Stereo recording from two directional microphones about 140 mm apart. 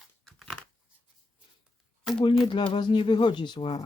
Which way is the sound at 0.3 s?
5° left (ahead or behind).